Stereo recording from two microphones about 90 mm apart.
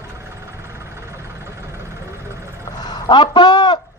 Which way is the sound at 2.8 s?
50° left (ahead or behind).